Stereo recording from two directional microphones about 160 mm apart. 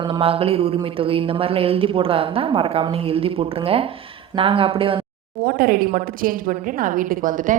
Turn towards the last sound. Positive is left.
turn(degrees=-55)  # may be behind; listen again after turning